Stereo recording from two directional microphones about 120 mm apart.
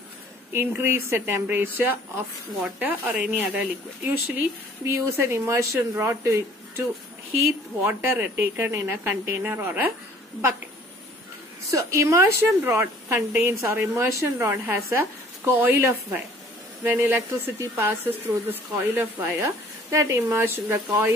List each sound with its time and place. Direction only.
0.5 s speech: 20° right (ahead or behind)
4.8 s speech: 20° right (ahead or behind)
7.8 s speech: 15° right (ahead or behind)
11.7 s speech: 25° right (ahead or behind)